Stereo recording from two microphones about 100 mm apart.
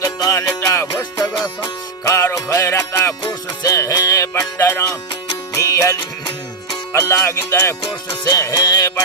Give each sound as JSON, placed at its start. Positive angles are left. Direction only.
{"t": 0.0, "sound": "music", "side_deg": 35}
{"t": 2.0, "sound": "music", "side_deg": 30}
{"t": 7.1, "sound": "music", "side_deg": 25}
{"t": 8.2, "sound": "music", "side_deg": 35}